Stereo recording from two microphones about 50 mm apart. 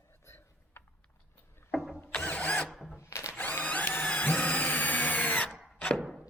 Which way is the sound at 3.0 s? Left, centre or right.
Left.